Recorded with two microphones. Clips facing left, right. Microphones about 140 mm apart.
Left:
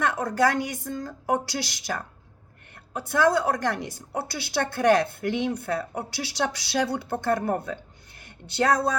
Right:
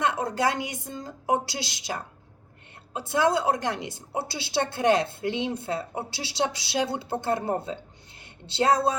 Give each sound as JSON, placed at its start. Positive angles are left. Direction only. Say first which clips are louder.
{"t": 0.0, "sound": "a woman's voice", "louder": "left 2 dB", "side_deg": -20}